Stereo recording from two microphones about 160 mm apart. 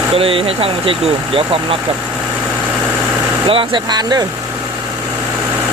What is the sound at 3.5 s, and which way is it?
Speech, 30° right (ahead or behind).